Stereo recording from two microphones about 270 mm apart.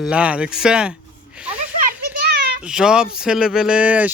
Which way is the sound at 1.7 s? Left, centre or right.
Right.